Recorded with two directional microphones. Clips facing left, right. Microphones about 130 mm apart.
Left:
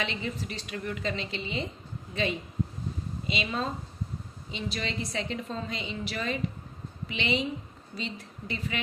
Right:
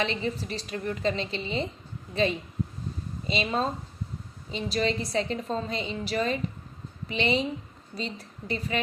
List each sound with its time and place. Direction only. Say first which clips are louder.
0.0 s a woman's voice: right 4 dB; 35° right (ahead or behind)